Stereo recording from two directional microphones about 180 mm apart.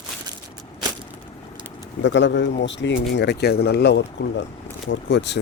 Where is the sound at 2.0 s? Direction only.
80° left.